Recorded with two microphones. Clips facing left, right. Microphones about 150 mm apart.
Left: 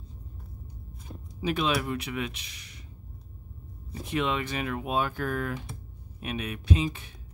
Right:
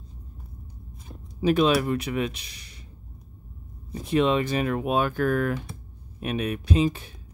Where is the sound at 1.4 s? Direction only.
40° right (ahead or behind).